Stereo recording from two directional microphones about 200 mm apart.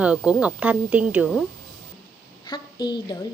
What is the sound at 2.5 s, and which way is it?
Speech, 20° left (ahead or behind).